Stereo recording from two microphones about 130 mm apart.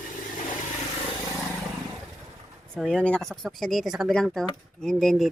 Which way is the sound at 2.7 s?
5° left (ahead or behind).